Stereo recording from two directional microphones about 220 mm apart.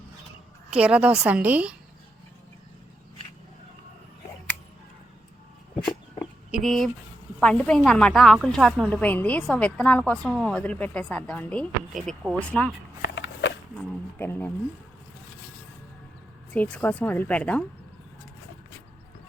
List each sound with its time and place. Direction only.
0.7 s a woman's voice: 5° right (ahead or behind)
6.5 s a woman's voice: centre (ahead or behind)
13.1 s dog: 55° left (ahead or behind)
14.2 s a woman's voice: 10° left (ahead or behind)
16.5 s a woman's voice: 5° left (ahead or behind)